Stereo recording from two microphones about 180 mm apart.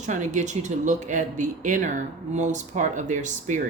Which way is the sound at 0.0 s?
40° right (ahead or behind).